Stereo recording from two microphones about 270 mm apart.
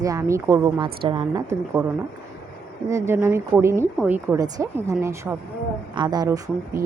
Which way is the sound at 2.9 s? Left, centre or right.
Centre.